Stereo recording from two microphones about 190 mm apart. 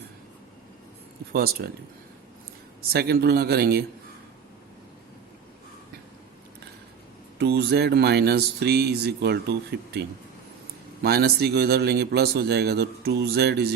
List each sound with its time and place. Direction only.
1.3 s speech: 55° right (ahead or behind)
2.9 s speech: 55° right (ahead or behind)
7.3 s speech: 60° right (ahead or behind)
11.0 s speech: 55° right (ahead or behind)